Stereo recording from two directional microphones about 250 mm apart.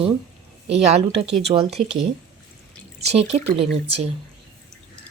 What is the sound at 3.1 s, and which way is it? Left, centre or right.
Speech, right.